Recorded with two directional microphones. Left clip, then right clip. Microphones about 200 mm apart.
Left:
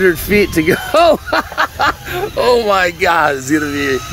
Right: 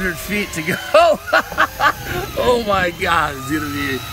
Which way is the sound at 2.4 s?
25° left (ahead or behind).